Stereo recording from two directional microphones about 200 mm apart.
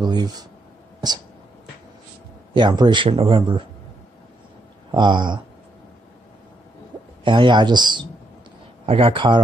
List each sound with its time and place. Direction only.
0.0 s speech: 20° right (ahead or behind)
2.5 s speech: 20° right (ahead or behind)
4.9 s speech: 20° right (ahead or behind)
7.2 s speech: 25° right (ahead or behind)